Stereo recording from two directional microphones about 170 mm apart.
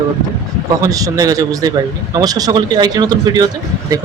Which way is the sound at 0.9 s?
20° right (ahead or behind).